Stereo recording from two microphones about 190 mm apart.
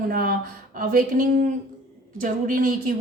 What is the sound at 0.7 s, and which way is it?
A woman's voice, 45° right (ahead or behind).